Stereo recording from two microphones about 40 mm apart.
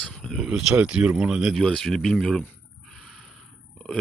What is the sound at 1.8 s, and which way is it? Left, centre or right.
Speech, centre.